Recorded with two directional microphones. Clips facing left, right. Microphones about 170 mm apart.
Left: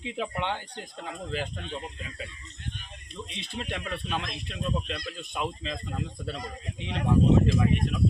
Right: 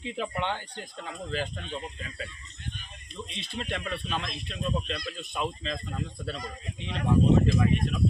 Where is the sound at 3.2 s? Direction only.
15° left (ahead or behind).